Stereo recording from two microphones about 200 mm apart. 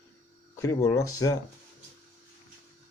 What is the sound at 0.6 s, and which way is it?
Speech, 15° left (ahead or behind).